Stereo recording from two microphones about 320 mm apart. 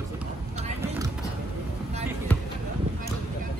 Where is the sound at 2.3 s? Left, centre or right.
Centre.